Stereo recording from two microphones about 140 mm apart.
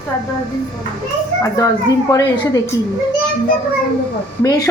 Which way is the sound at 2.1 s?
25° left (ahead or behind).